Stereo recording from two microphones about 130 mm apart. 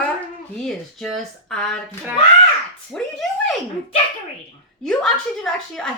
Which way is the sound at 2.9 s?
5° left (ahead or behind).